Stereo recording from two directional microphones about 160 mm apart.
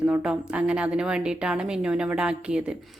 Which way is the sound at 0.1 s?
10° right (ahead or behind).